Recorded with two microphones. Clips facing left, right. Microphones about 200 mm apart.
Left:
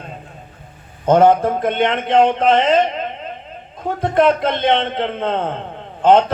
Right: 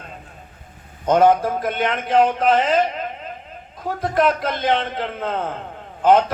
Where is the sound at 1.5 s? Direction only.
25° left (ahead or behind).